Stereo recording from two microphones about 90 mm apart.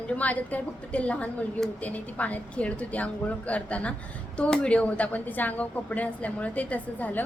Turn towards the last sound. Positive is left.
turn(degrees=15)  # may be behind; listen again after turning